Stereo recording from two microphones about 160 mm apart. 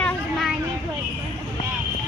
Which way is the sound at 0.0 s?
5° left (ahead or behind).